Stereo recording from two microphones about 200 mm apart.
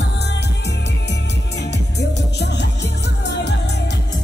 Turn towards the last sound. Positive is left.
turn(degrees=60)  # may be behind; listen again after turning